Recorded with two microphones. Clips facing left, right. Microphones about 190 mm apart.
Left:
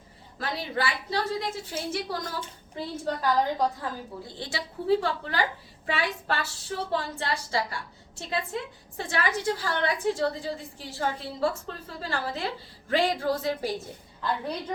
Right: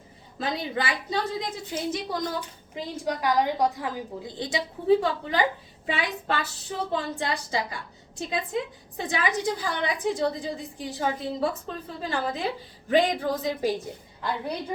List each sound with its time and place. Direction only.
0.3 s a woman's voice: 20° right (ahead or behind)
9.0 s a woman's voice: 15° right (ahead or behind)